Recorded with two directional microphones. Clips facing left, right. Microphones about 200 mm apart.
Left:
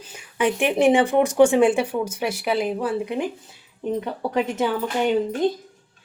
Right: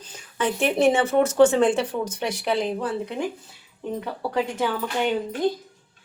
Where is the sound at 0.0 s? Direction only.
10° left (ahead or behind).